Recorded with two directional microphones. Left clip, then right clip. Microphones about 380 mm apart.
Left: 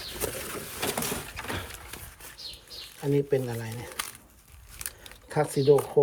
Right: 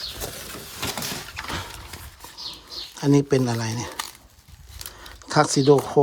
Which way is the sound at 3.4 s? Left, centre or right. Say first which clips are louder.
Right 9 dB; right.